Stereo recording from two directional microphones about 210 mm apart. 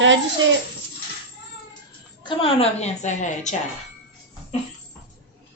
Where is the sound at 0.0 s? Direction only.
65° right (ahead or behind).